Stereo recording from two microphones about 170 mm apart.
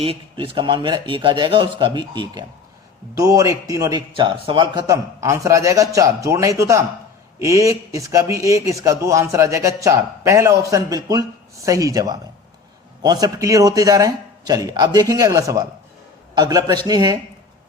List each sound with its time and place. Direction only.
0.0 s a man's voice: 35° right (ahead or behind)